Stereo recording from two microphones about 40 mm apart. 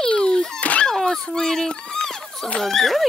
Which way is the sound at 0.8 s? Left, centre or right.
Centre.